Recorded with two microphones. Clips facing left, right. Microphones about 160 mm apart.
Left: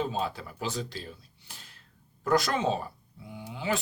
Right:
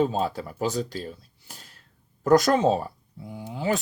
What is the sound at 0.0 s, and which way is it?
Speech, 40° right (ahead or behind).